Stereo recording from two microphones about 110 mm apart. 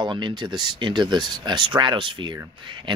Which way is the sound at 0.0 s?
45° right (ahead or behind).